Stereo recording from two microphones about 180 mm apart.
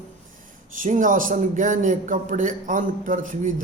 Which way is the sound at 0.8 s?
45° right (ahead or behind).